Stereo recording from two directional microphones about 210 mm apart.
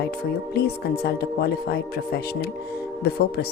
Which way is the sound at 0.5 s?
50° left (ahead or behind).